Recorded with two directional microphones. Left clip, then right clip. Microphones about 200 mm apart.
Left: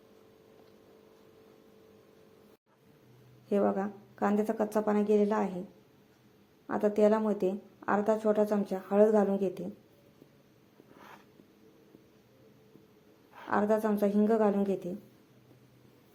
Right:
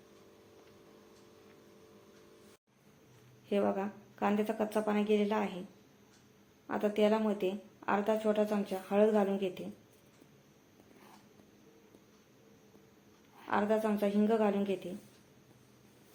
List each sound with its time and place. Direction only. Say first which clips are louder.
3.5 s speech: left 3 dB; 25° left (ahead or behind)
6.7 s speech: left 4 dB; 35° left (ahead or behind)
13.5 s speech: left 3 dB; 35° left (ahead or behind)